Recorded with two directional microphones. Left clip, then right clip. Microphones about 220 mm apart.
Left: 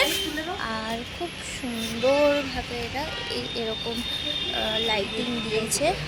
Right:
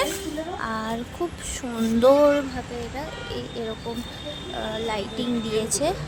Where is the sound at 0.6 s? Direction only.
20° right (ahead or behind).